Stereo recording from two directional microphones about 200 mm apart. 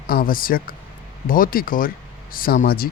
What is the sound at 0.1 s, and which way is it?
Speech, 45° left (ahead or behind).